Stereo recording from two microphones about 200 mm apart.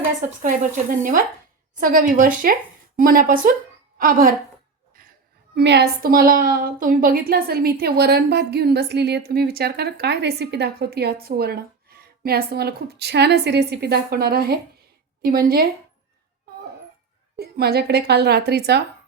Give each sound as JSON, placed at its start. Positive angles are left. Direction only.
{"t": 0.4, "sound": "a woman's voice", "side_deg": -40}
{"t": 5.5, "sound": "a woman's voice", "side_deg": -55}
{"t": 17.3, "sound": "a woman's voice", "side_deg": -50}